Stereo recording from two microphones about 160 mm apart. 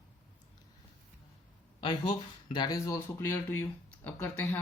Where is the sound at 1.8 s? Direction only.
30° left (ahead or behind).